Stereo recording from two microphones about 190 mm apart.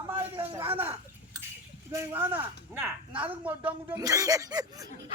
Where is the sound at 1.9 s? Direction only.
10° right (ahead or behind).